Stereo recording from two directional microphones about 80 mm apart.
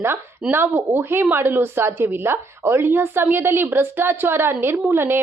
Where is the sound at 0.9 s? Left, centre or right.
Right.